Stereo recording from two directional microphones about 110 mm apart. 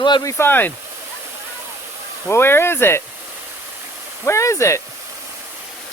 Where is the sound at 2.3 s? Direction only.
20° left (ahead or behind).